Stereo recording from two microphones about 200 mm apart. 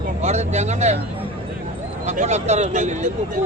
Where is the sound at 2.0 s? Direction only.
35° right (ahead or behind).